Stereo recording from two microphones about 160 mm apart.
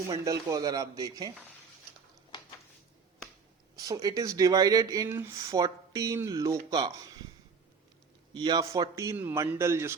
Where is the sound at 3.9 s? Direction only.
20° right (ahead or behind).